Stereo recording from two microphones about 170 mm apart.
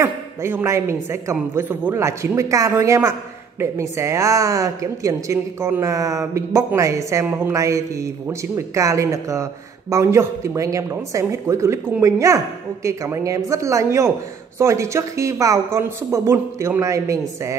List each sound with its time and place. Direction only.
0.0 s a man's voice: 15° right (ahead or behind)